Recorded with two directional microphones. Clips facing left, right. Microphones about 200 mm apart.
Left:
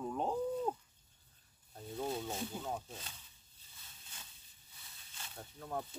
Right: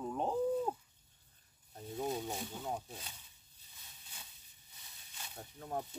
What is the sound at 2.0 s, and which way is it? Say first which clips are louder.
Speech: right 1 dB; 15° right (ahead or behind).